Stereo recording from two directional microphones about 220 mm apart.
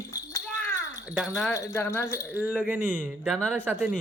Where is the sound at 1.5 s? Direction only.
10° left (ahead or behind).